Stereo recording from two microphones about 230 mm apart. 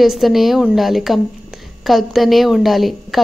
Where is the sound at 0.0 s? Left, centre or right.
Centre.